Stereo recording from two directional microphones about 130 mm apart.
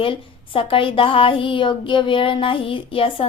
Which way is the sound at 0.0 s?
45° left (ahead or behind).